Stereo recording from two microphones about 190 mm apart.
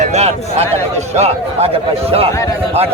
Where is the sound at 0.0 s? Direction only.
35° right (ahead or behind).